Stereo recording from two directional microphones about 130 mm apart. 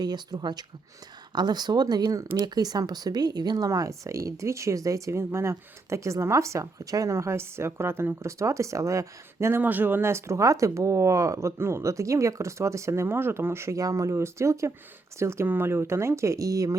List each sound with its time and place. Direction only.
0.0 s speech: 30° right (ahead or behind)